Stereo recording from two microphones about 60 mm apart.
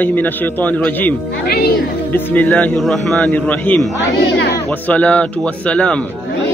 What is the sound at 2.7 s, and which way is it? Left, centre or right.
Speech, centre.